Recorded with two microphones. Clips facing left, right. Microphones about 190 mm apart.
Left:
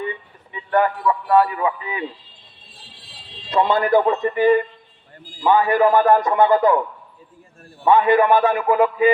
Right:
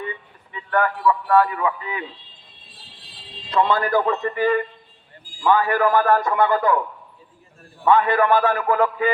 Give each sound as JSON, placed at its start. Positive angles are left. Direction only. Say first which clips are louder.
{"t": 0.5, "sound": "a sound", "louder": "left 3 dB", "side_deg": 20}
{"t": 1.0, "sound": "a man's voice", "louder": "left 1 dB", "side_deg": 20}
{"t": 3.5, "sound": "a man's voice", "louder": "left 3 dB", "side_deg": 25}
{"t": 7.9, "sound": "a man's voice", "louder": "left 3 dB", "side_deg": 20}